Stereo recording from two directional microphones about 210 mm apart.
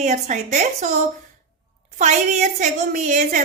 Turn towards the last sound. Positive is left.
turn(degrees=-35)  # may be behind; listen again after turning